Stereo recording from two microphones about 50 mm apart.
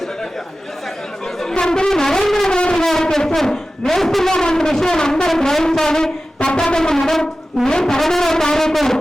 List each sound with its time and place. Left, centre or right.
1.4 s music: centre
2.5 s a sound: centre
2.8 s speech: centre
5.3 s music: centre